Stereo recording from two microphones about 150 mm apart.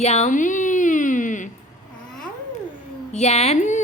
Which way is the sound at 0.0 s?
45° left (ahead or behind).